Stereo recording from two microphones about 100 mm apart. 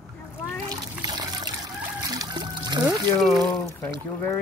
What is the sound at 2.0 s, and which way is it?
Music, 45° right (ahead or behind).